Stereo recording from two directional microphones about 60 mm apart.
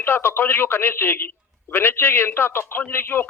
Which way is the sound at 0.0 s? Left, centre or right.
Left.